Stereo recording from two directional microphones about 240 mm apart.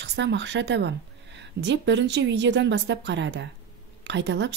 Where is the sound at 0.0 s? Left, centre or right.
Right.